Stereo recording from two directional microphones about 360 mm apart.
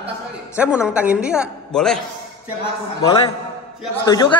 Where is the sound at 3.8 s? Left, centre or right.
Centre.